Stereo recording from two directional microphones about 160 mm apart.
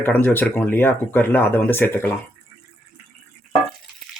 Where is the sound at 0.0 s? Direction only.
10° left (ahead or behind).